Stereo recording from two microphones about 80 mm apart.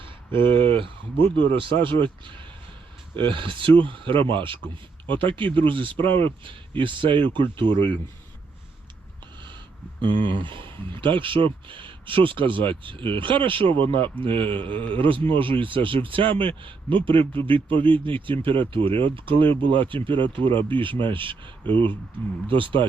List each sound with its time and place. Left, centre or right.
0.3 s speech: right
10.0 s speech: right